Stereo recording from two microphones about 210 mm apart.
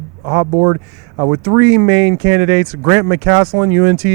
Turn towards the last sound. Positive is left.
turn(degrees=-15)  # may be behind; listen again after turning